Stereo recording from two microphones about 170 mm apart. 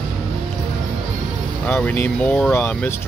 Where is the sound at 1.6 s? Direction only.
10° left (ahead or behind).